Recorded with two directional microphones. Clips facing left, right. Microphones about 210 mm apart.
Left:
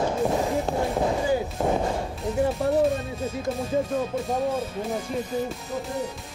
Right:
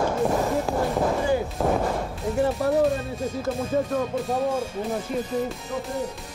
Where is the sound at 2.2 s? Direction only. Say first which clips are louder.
Right 2 dB; centre (ahead or behind).